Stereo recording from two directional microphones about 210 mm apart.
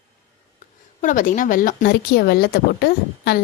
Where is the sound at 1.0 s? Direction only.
40° left (ahead or behind).